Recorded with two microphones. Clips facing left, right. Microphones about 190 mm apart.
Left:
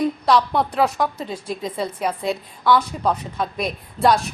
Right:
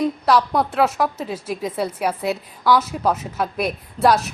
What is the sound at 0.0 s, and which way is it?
A woman's voice, 5° right (ahead or behind).